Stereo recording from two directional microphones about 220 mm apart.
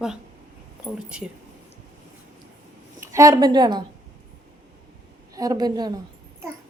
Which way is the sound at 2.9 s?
15° right (ahead or behind).